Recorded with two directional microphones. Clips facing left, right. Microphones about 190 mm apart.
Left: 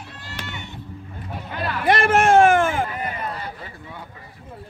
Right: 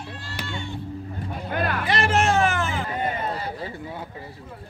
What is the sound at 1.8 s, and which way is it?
Music, 55° left (ahead or behind).